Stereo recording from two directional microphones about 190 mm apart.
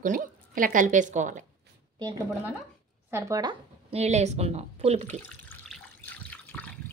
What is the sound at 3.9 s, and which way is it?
Speech, 35° right (ahead or behind).